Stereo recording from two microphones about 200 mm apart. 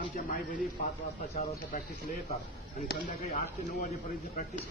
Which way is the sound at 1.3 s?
30° left (ahead or behind).